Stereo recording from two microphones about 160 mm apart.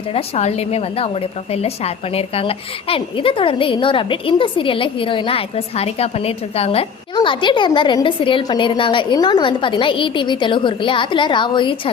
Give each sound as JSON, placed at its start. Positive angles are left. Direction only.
{"t": 0.1, "sound": "a woman's voice", "side_deg": 40}